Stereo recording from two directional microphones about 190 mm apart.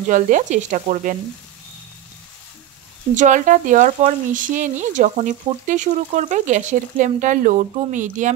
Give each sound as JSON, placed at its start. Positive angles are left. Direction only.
{"t": 0.1, "sound": "sizzle", "side_deg": -45}
{"t": 3.2, "sound": "speech", "side_deg": -40}